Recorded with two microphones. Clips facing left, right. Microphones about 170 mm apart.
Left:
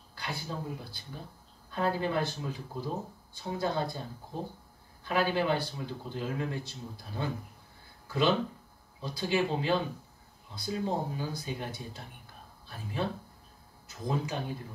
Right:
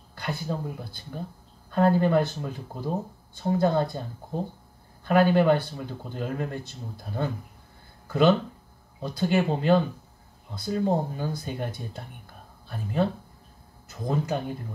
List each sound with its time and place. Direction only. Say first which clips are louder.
0.1 s speech: right 7 dB; 50° right (ahead or behind)
5.0 s speech: right 9 dB; 50° right (ahead or behind)